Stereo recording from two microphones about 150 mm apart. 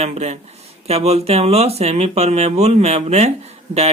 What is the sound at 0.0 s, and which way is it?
Speech, 45° right (ahead or behind).